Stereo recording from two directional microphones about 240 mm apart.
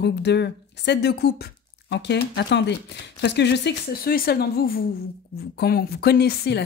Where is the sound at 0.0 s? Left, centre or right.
Left.